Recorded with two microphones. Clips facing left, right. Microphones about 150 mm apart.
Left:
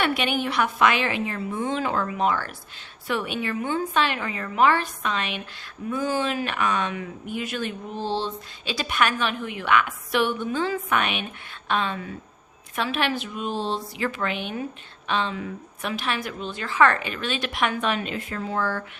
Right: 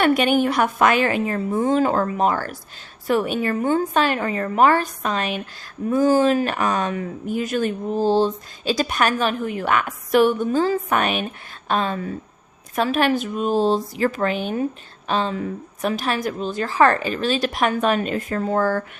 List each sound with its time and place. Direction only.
0.0 s a woman's voice: 45° right (ahead or behind)